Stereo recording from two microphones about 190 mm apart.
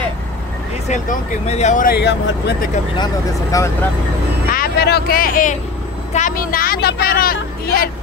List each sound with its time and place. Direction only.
0.8 s speech: 40° left (ahead or behind)
2.0 s speech: 60° left (ahead or behind)
3.5 s speech: 15° left (ahead or behind)
4.5 s speech: 50° left (ahead or behind)